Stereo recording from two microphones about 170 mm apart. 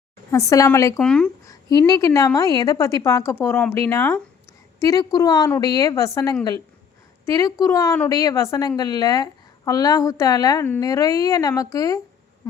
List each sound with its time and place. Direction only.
0.3 s a woman's voice: 15° left (ahead or behind)
0.9 s speech: 5° left (ahead or behind)
1.9 s a woman's voice: 20° left (ahead or behind)
7.3 s a woman's voice: 20° left (ahead or behind)